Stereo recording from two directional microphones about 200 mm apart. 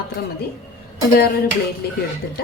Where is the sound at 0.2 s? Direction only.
50° left (ahead or behind).